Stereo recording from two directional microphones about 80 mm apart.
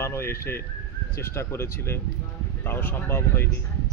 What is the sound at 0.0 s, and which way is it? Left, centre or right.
A man's voice, left.